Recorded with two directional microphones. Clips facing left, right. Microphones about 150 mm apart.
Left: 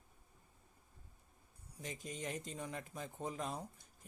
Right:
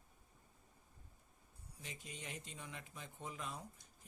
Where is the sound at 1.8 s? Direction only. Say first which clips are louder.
Left 7 dB; 45° left (ahead or behind).